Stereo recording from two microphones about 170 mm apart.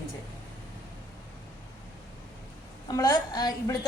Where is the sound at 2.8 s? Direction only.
25° left (ahead or behind).